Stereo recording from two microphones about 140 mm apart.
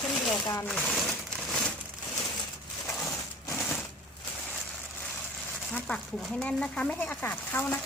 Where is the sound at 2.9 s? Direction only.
Centre (ahead or behind).